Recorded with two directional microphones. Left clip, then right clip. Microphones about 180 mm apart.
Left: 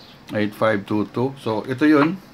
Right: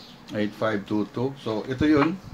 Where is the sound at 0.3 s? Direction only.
25° left (ahead or behind).